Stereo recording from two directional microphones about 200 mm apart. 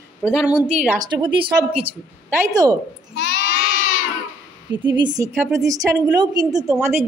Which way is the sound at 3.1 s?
55° left (ahead or behind).